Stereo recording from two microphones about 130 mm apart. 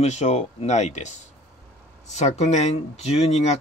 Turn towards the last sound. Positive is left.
turn(degrees=60)  # may be behind; listen again after turning